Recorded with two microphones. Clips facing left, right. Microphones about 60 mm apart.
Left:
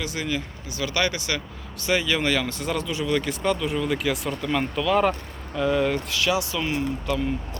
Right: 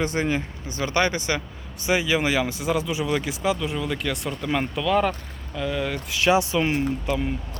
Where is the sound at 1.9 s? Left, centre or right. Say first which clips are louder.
Right 1 dB; centre.